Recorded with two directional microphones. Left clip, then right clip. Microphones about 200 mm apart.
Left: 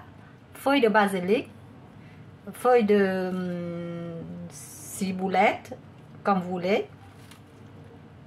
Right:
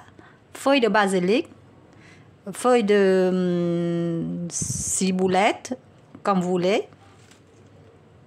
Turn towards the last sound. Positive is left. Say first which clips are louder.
# right 3 dB
turn(degrees=-55)  # may be behind; listen again after turning